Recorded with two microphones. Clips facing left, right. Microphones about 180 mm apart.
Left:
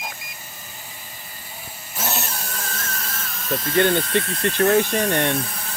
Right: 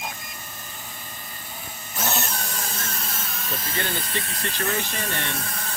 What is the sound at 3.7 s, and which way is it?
Speech, 60° left (ahead or behind).